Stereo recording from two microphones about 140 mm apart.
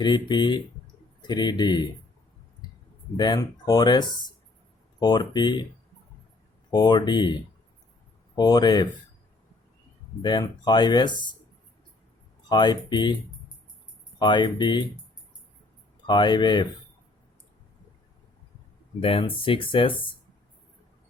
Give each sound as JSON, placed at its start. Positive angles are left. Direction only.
{"t": 0.0, "sound": "speech", "side_deg": 30}
{"t": 3.2, "sound": "speech", "side_deg": 30}
{"t": 6.7, "sound": "speech", "side_deg": 30}
{"t": 10.2, "sound": "speech", "side_deg": 30}
{"t": 12.5, "sound": "speech", "side_deg": 30}
{"t": 14.2, "sound": "speech", "side_deg": 35}
{"t": 16.0, "sound": "speech", "side_deg": 35}
{"t": 18.9, "sound": "speech", "side_deg": 40}